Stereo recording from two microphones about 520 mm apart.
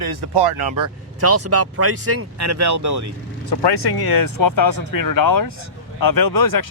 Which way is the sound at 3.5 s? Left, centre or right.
Left.